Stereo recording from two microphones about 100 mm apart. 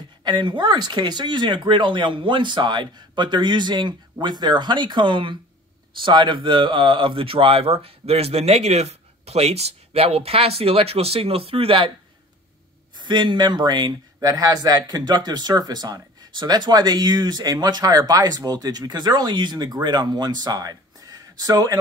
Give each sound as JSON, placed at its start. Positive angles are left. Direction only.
{"t": 0.2, "sound": "speech", "side_deg": -50}
{"t": 12.9, "sound": "speech", "side_deg": -50}